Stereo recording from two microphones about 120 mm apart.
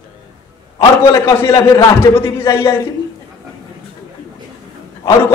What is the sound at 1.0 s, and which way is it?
A man's voice, 25° left (ahead or behind).